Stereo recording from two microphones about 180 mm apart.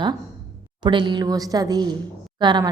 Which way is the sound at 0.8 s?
25° right (ahead or behind).